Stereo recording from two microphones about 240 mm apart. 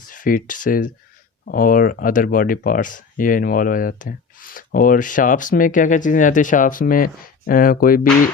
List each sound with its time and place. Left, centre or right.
0.0 s speech: left